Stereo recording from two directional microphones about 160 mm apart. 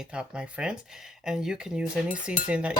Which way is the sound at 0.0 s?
5° right (ahead or behind).